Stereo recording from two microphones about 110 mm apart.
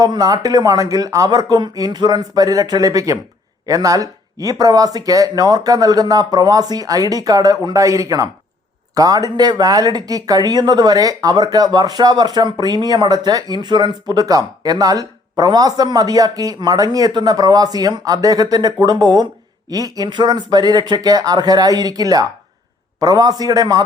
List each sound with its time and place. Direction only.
0.0 s speech: 35° right (ahead or behind)